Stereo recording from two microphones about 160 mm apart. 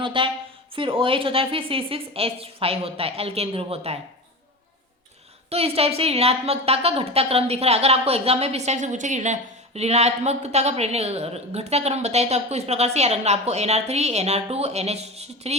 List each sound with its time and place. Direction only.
0.0 s a woman's voice: 30° right (ahead or behind)
5.5 s a woman's voice: 40° right (ahead or behind)